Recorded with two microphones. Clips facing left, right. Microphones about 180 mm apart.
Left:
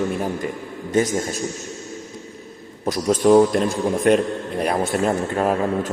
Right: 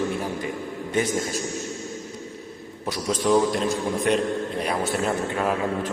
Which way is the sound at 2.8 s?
45° left (ahead or behind).